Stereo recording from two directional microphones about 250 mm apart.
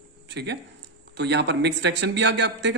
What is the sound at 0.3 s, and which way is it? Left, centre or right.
A man's voice, right.